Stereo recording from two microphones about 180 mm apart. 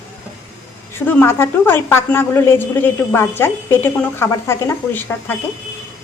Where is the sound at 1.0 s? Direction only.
10° left (ahead or behind).